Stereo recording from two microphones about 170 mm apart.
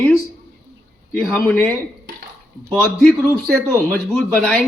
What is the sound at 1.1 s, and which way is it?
Speech, 5° left (ahead or behind).